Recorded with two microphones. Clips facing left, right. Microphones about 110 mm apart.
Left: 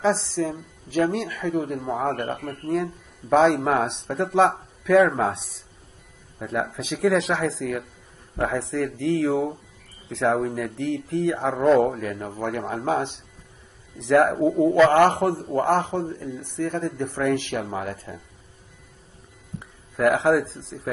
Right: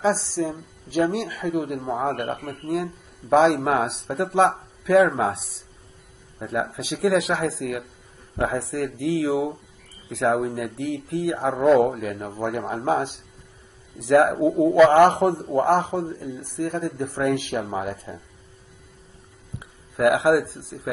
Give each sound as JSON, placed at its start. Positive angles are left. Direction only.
{"t": 0.0, "sound": "a man's voice", "side_deg": -5}
{"t": 19.6, "sound": "speech", "side_deg": -5}